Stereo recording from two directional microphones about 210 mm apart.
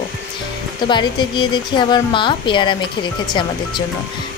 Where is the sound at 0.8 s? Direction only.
20° left (ahead or behind).